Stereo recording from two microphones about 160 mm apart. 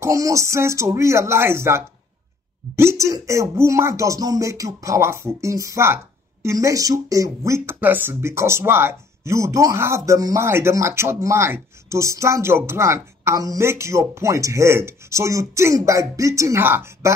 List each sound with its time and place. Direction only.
0.0 s speech: 20° right (ahead or behind)